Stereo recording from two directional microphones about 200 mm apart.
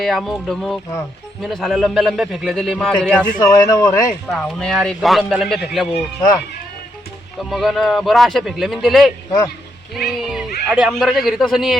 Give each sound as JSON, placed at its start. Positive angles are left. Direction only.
{"t": 0.0, "sound": "speech", "side_deg": 0}
{"t": 3.4, "sound": "speech", "side_deg": 20}
{"t": 4.3, "sound": "speech", "side_deg": 0}
{"t": 7.5, "sound": "speech", "side_deg": 0}